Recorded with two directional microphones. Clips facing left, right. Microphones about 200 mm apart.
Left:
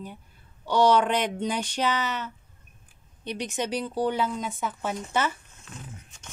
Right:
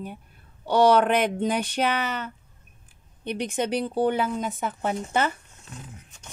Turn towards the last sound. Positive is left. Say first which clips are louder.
# right 3 dB
turn(degrees=-55)  # may be behind; listen again after turning